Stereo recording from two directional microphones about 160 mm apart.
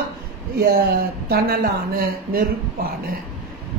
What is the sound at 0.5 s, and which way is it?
A woman's voice, 75° right (ahead or behind).